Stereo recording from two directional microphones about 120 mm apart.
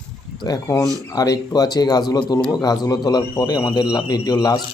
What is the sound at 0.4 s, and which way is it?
A man's voice, 30° left (ahead or behind).